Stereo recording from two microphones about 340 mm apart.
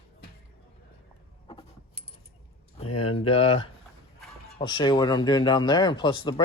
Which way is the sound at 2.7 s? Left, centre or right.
Centre.